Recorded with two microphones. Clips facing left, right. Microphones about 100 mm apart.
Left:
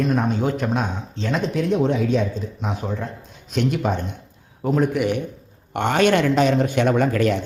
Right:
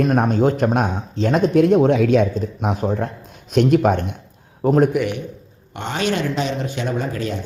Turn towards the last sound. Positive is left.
turn(degrees=65)  # may be behind; listen again after turning